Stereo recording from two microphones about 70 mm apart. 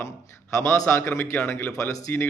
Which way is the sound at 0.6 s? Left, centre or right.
Left.